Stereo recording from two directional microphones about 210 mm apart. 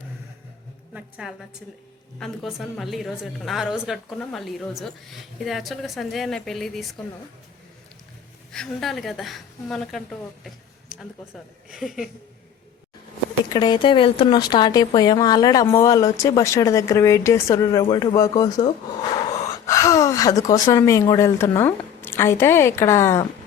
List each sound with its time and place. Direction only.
0.9 s a sound: 5° right (ahead or behind)
2.1 s a woman's voice: centre (ahead or behind)
8.5 s a woman's voice: centre (ahead or behind)
13.5 s speech: 20° left (ahead or behind)